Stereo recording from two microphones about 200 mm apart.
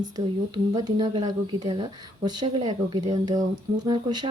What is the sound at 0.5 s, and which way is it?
Speech, 20° right (ahead or behind).